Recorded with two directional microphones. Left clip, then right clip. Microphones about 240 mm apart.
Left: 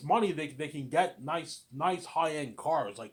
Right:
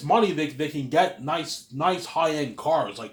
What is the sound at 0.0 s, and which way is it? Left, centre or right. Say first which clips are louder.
A man's voice: right 7 dB; left.